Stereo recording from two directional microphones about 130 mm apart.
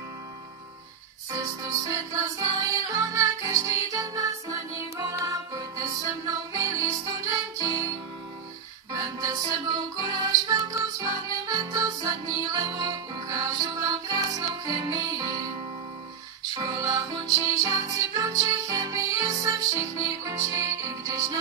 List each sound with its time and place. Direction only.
1.3 s music: 25° right (ahead or behind)
8.9 s music: 30° right (ahead or behind)
16.5 s music: 25° right (ahead or behind)